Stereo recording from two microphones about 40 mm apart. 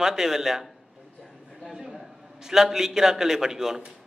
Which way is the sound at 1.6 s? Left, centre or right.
Centre.